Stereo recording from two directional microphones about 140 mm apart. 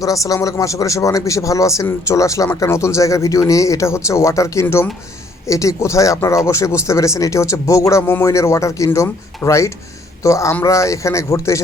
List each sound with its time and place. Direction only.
0.0 s speech: 25° left (ahead or behind)